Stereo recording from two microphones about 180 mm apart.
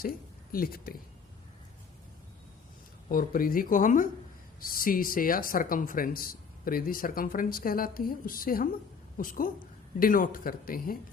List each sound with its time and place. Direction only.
0.5 s speech: 55° left (ahead or behind)
3.1 s speech: 50° left (ahead or behind)